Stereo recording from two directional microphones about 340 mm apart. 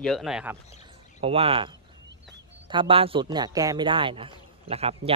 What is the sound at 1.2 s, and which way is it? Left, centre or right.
Speech, centre.